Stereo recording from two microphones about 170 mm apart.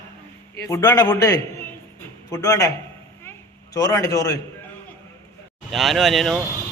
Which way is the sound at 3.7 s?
20° left (ahead or behind).